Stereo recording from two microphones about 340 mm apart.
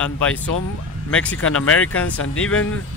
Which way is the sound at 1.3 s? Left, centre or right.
Left.